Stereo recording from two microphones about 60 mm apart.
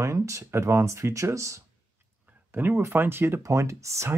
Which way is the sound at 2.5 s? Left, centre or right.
Right.